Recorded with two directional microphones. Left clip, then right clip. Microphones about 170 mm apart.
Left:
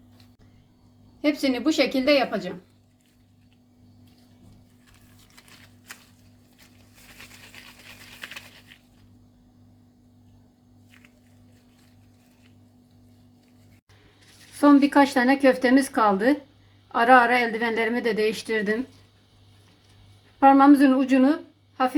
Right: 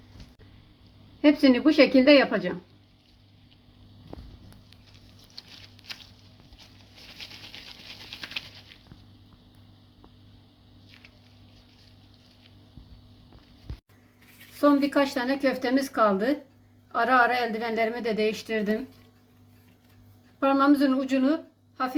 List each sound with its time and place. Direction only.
1.2 s a woman's voice: 35° right (ahead or behind)
14.6 s a woman's voice: 50° left (ahead or behind)
20.4 s a woman's voice: 50° left (ahead or behind)